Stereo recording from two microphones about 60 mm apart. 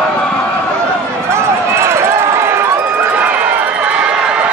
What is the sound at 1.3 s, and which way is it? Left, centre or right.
Run, right.